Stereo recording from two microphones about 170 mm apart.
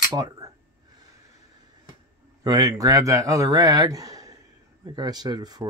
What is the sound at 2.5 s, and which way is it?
Speech, 20° right (ahead or behind).